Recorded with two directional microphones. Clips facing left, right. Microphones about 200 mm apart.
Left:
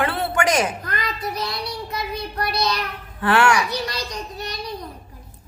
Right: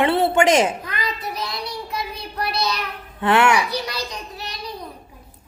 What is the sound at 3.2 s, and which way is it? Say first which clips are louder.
Speech: right 1 dB; 20° right (ahead or behind).